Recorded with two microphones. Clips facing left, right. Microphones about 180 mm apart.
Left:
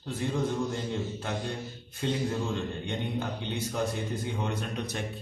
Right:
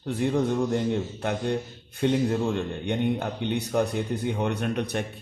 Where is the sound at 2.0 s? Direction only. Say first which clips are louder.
Right 7 dB; 60° right (ahead or behind).